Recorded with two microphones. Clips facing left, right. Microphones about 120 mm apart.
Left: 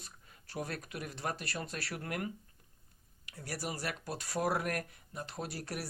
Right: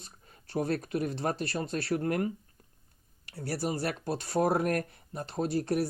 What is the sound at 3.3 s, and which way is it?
Speech, 30° right (ahead or behind).